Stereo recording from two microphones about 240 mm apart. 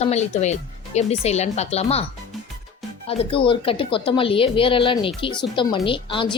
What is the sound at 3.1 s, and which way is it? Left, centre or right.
A woman's voice, left.